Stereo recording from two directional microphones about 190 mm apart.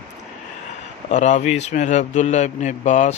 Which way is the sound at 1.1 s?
40° left (ahead or behind).